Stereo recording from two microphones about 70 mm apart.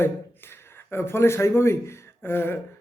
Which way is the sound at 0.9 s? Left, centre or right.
Left.